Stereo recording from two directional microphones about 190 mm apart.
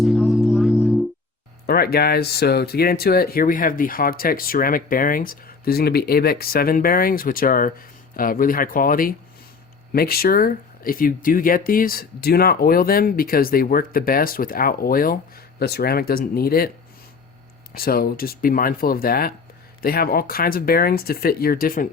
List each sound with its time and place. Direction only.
0.0 s music: centre (ahead or behind)
1.6 s speech: 55° left (ahead or behind)
17.7 s speech: 50° left (ahead or behind)